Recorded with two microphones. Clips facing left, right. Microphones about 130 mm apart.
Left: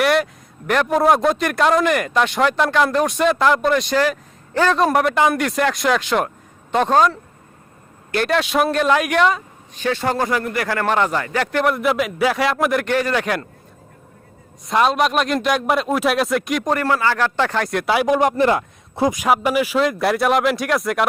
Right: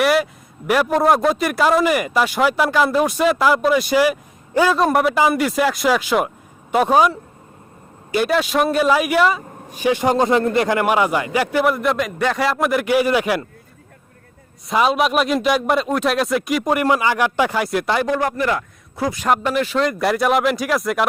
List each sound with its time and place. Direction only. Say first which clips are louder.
0.0 s a man's voice: right 1 dB; 5° right (ahead or behind)
14.7 s speech: even; centre (ahead or behind)
17.9 s a man's voice: left 6 dB; 15° left (ahead or behind)
19.1 s speech: right 3 dB; 10° left (ahead or behind)